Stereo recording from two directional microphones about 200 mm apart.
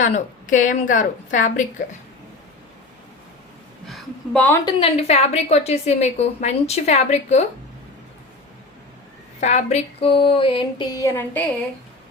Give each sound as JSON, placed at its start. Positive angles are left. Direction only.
{"t": 0.0, "sound": "a woman's voice", "side_deg": 40}
{"t": 3.8, "sound": "a woman's voice", "side_deg": 0}
{"t": 4.6, "sound": "a woman's voice", "side_deg": 30}
{"t": 9.4, "sound": "a sound", "side_deg": 35}